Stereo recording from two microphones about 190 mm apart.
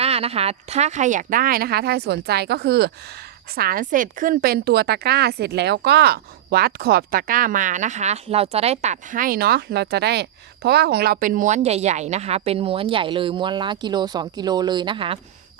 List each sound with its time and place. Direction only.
0.0 s a woman's voice: 30° right (ahead or behind)